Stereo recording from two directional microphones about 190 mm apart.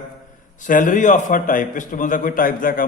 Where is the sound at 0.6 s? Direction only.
45° left (ahead or behind).